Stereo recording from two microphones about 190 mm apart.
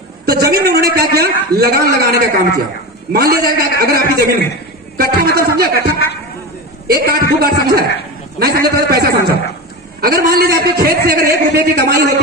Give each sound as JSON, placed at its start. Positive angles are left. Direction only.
{"t": 0.2, "sound": "a man's voice", "side_deg": -55}